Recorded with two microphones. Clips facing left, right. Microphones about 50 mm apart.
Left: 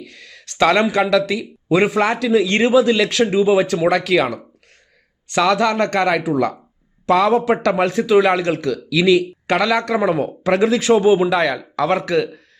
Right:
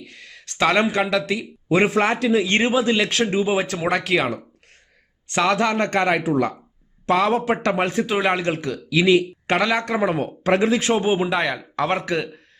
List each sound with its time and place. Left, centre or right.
0.0 s speech: right